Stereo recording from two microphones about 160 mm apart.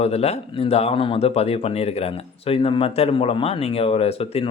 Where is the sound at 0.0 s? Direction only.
40° left (ahead or behind).